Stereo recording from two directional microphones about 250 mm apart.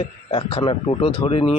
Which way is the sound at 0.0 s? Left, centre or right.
Left.